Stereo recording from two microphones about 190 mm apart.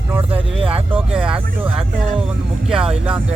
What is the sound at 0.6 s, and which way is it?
Speech, 30° right (ahead or behind).